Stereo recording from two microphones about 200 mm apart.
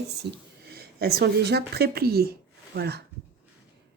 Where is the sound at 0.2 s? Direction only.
55° right (ahead or behind).